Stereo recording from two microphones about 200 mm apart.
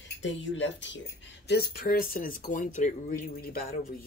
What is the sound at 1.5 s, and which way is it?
Speech, 50° left (ahead or behind).